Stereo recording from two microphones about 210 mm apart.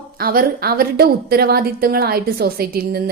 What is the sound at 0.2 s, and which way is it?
Speech, 45° right (ahead or behind).